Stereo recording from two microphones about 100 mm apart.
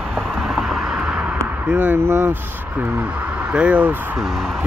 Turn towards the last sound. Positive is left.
turn(degrees=0)  # may be behind; listen again after turning